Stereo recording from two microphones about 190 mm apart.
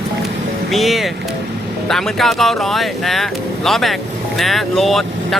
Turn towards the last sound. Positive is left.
turn(degrees=0)  # may be behind; listen again after turning